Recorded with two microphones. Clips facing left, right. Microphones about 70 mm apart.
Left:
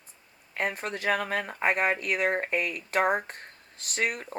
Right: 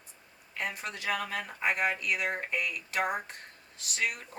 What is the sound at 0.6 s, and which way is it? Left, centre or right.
Speech, left.